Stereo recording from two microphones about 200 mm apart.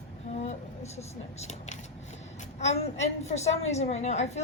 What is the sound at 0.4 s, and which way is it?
A woman's voice, 35° left (ahead or behind).